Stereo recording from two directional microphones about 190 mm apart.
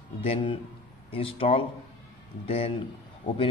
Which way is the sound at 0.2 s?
30° left (ahead or behind).